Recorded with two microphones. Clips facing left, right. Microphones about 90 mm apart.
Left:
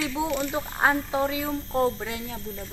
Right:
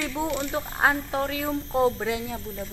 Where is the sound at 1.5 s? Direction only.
5° right (ahead or behind).